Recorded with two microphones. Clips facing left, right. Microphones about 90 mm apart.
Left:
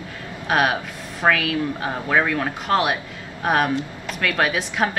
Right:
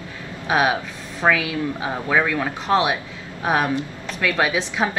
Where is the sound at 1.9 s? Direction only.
Centre (ahead or behind).